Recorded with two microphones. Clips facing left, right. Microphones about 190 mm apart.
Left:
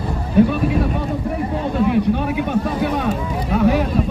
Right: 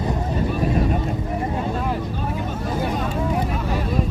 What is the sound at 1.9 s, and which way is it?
Vehicle, 70° left (ahead or behind).